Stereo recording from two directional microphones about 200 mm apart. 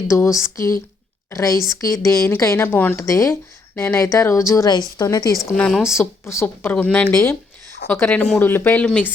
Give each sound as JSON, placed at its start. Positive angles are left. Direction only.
{"t": 0.1, "sound": "speech", "side_deg": 15}
{"t": 5.5, "sound": "speech", "side_deg": 5}
{"t": 5.9, "sound": "speech", "side_deg": 15}